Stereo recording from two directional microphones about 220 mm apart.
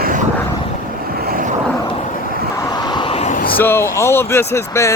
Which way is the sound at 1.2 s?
40° right (ahead or behind).